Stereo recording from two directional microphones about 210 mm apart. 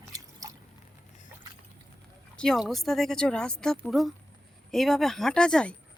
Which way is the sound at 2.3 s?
Centre (ahead or behind).